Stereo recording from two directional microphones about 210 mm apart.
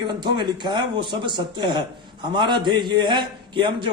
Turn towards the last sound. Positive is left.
turn(degrees=-20)  # may be behind; listen again after turning